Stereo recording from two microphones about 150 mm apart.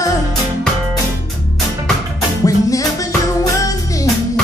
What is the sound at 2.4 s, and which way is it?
Music, 25° left (ahead or behind).